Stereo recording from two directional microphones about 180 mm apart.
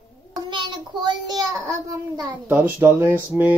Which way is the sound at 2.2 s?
10° right (ahead or behind).